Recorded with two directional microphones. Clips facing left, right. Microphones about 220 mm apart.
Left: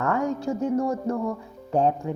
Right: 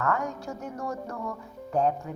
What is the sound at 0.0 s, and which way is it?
A woman's voice, 30° left (ahead or behind).